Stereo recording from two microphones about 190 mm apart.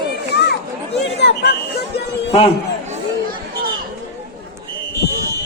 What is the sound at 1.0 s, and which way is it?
Chatter, 60° left (ahead or behind).